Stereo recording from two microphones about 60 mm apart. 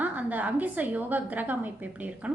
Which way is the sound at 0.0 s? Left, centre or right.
Right.